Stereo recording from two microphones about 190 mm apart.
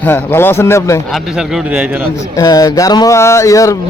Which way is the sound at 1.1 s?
Centre (ahead or behind).